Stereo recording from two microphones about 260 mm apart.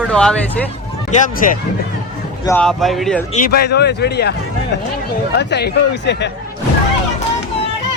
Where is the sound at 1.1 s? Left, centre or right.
Left.